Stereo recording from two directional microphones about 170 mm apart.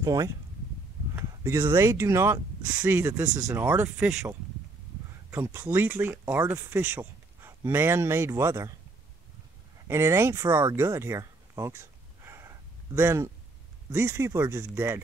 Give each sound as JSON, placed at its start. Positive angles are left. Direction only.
{"t": 0.0, "sound": "speech", "side_deg": -20}
{"t": 5.3, "sound": "speech", "side_deg": -15}
{"t": 9.8, "sound": "speech", "side_deg": -15}